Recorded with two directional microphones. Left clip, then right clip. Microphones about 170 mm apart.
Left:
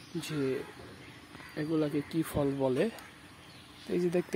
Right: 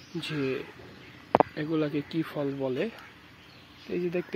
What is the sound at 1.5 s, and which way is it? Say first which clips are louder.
Speech: right 2 dB; 5° left (ahead or behind).